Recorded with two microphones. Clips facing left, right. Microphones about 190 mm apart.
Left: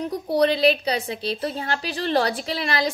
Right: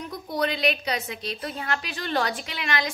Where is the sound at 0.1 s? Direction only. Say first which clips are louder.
Left 7 dB; 35° left (ahead or behind).